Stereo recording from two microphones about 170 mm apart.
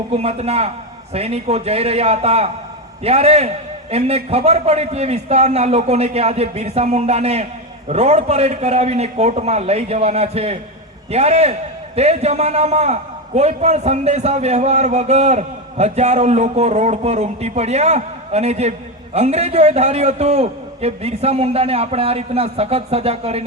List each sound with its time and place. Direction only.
0.1 s a man's voice: 35° right (ahead or behind)